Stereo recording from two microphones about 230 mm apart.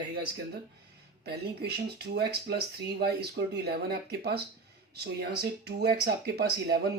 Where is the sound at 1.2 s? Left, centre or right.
Right.